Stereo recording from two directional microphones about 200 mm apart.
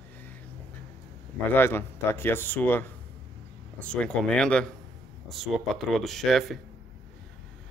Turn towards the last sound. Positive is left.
turn(degrees=0)  # may be behind; listen again after turning